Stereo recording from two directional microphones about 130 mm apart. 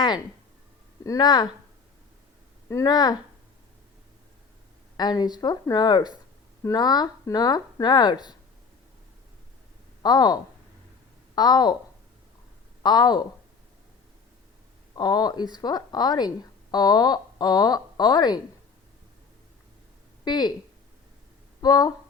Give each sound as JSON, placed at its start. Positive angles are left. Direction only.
{"t": 1.0, "sound": "a woman's voice", "side_deg": 30}
{"t": 2.6, "sound": "a woman's voice", "side_deg": 25}
{"t": 4.9, "sound": "a woman's voice", "side_deg": 30}
{"t": 10.0, "sound": "a woman's voice", "side_deg": 30}
{"t": 12.8, "sound": "speech", "side_deg": 35}
{"t": 14.9, "sound": "a woman's voice", "side_deg": 30}
{"t": 20.2, "sound": "speech", "side_deg": 35}
{"t": 21.6, "sound": "a woman's voice", "side_deg": 30}